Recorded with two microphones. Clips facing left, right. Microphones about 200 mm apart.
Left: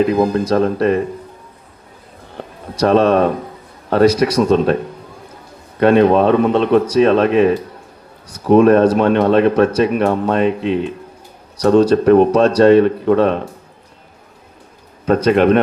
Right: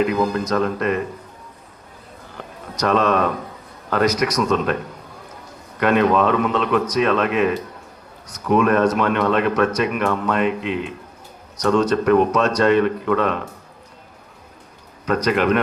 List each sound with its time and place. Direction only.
0.0 s speech: 30° left (ahead or behind)
2.4 s a man's voice: 30° left (ahead or behind)
5.8 s speech: 30° left (ahead or behind)
15.0 s speech: 30° left (ahead or behind)